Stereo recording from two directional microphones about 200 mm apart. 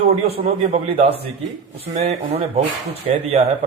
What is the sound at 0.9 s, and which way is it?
A man's voice, 30° right (ahead or behind).